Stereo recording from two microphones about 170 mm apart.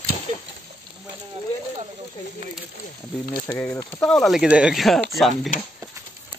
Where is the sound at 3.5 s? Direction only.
15° left (ahead or behind).